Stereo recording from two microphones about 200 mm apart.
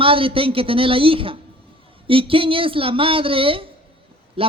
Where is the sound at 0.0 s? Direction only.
25° right (ahead or behind).